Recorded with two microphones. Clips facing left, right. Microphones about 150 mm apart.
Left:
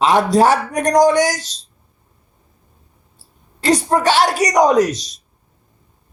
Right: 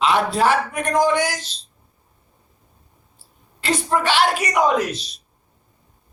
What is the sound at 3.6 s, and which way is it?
A man's voice, 40° left (ahead or behind).